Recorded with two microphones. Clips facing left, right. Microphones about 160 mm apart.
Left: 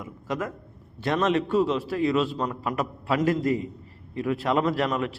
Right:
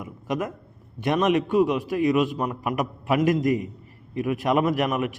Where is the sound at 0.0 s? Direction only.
20° right (ahead or behind).